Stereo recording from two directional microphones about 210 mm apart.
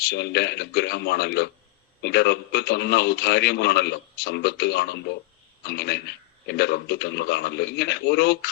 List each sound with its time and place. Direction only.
0.0 s a man's voice: 50° left (ahead or behind)